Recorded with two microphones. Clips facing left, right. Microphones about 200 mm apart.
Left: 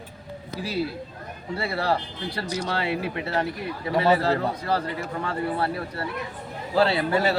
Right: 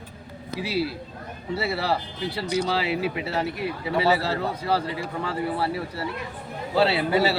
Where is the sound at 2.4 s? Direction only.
60° right (ahead or behind).